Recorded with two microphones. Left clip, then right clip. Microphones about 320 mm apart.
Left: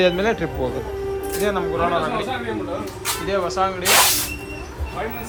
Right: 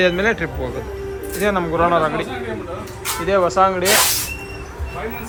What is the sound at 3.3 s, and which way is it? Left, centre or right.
Speech, centre.